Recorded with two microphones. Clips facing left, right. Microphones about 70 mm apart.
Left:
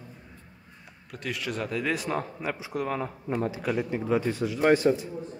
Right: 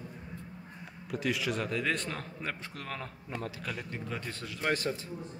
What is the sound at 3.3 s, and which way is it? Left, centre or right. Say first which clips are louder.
A man's voice: left 10 dB; left.